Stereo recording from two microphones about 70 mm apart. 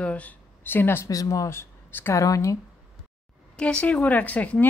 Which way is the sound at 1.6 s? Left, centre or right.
Left.